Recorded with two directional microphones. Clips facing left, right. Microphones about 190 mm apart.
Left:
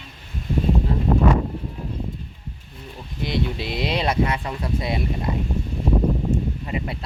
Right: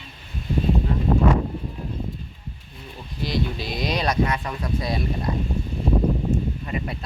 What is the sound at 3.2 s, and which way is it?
Speech, 25° left (ahead or behind).